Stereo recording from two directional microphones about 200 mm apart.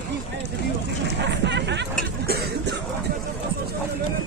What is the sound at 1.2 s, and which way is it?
Music, 60° right (ahead or behind).